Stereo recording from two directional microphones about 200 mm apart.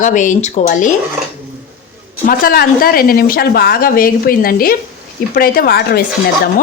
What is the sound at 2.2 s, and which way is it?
Speech, 50° left (ahead or behind).